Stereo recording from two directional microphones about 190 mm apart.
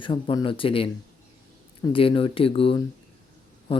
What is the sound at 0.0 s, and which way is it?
Speech, 25° left (ahead or behind).